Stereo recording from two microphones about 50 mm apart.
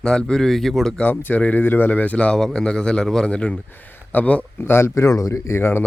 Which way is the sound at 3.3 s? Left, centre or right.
Left.